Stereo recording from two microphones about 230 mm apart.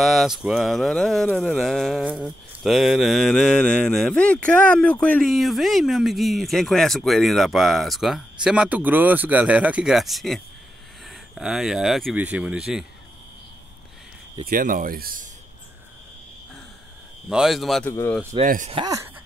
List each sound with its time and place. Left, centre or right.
0.0 s speech: centre
14.5 s speech: right
17.3 s speech: centre
18.4 s speech: right
18.8 s speech: centre